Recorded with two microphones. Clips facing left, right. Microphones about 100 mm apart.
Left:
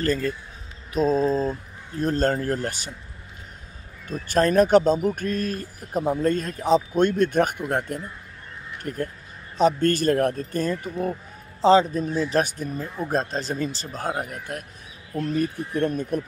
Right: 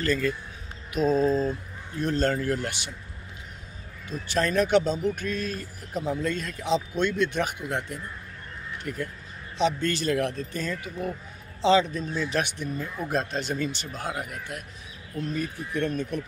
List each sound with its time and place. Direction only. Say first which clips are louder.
0.0 s a man's voice: left 2 dB; 40° left (ahead or behind)
4.1 s a man's voice: left 6 dB; 45° left (ahead or behind)